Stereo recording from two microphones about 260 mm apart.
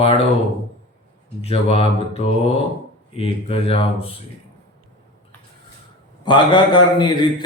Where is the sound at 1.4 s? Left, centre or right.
Left.